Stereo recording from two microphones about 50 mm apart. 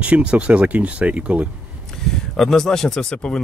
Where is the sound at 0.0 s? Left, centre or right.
Right.